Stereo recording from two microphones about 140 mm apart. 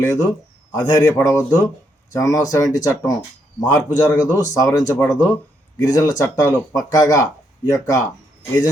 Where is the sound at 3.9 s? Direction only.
30° left (ahead or behind).